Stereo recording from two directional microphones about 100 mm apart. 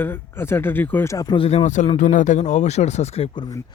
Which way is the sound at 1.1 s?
35° left (ahead or behind).